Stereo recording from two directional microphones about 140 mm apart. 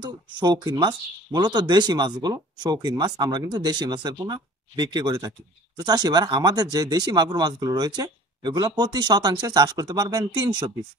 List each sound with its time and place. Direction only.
0.0 s speech: 30° right (ahead or behind)